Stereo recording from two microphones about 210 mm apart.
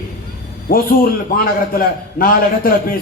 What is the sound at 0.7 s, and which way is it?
A man's voice, 45° left (ahead or behind).